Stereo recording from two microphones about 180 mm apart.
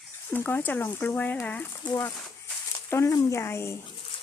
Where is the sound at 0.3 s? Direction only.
10° left (ahead or behind).